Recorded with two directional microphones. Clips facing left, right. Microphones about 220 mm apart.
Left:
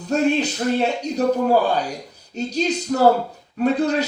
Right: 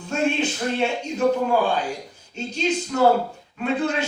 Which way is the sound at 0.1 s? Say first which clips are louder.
Left 4 dB; 40° left (ahead or behind).